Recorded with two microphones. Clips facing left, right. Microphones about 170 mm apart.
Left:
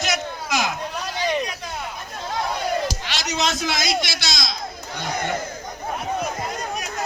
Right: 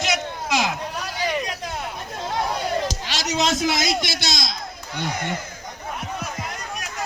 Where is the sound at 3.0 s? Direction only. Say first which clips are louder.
Right 1 dB; 40° right (ahead or behind).